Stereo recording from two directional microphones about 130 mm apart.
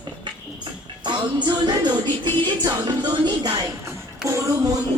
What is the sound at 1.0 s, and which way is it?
Music, 35° right (ahead or behind).